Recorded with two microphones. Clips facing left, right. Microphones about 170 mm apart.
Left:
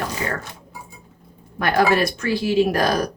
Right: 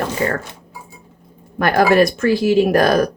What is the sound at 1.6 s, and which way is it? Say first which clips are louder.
Speech: right 5 dB; 50° right (ahead or behind).